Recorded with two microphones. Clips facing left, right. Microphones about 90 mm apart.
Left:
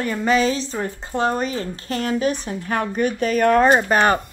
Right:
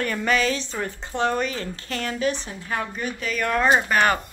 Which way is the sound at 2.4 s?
50° left (ahead or behind).